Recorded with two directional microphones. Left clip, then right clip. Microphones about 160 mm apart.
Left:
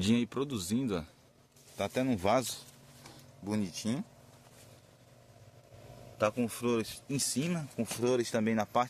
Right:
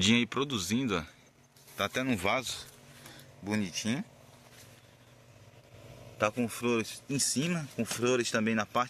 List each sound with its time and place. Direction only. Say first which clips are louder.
0.0 s speech: right 5 dB; 10° left (ahead or behind)
2.2 s speech: left 4 dB; 35° left (ahead or behind)
3.4 s speech: right 3 dB; 5° left (ahead or behind)
6.1 s speech: right 1 dB; centre (ahead or behind)